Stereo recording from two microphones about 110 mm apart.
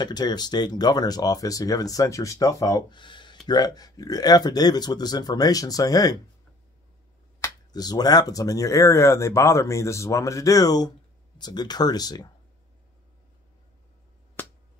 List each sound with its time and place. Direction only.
0.0 s speech: 40° left (ahead or behind)
3.0 s speech: 45° left (ahead or behind)
7.4 s speech: 35° left (ahead or behind)
14.4 s finger snapping: 20° left (ahead or behind)